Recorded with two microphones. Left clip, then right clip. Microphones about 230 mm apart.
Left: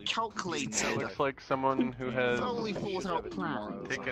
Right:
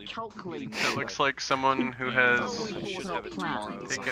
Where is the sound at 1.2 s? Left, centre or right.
Right.